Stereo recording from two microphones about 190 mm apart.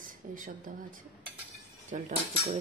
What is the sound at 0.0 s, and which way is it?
Speech, 45° right (ahead or behind).